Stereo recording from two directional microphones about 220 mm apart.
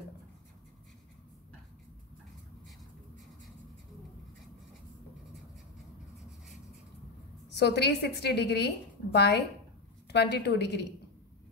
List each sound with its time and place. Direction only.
7.4 s a woman's voice: 50° left (ahead or behind)